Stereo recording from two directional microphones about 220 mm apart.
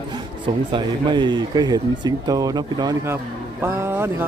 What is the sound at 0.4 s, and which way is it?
A man's voice, 20° right (ahead or behind).